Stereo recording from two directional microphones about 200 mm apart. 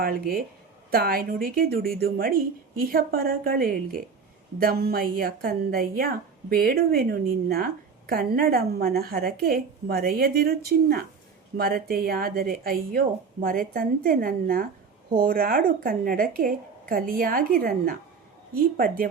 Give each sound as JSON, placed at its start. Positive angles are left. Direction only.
{"t": 0.0, "sound": "a woman's voice", "side_deg": -45}